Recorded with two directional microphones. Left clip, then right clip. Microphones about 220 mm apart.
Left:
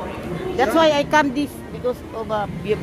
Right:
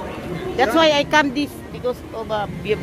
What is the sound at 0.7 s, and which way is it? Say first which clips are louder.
Speech: even; 10° left (ahead or behind).